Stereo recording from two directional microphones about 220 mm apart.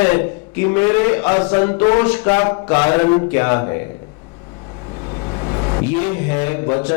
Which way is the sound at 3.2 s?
15° left (ahead or behind).